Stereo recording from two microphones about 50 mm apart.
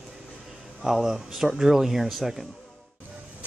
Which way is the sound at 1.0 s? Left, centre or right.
Centre.